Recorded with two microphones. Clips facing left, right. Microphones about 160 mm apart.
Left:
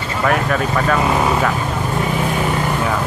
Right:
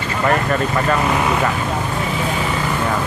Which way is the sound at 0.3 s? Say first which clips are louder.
Even; centre (ahead or behind).